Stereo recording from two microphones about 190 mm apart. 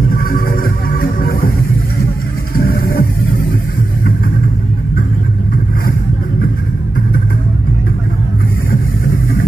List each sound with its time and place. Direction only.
0.1 s music: 50° left (ahead or behind)
2.5 s music: 50° left (ahead or behind)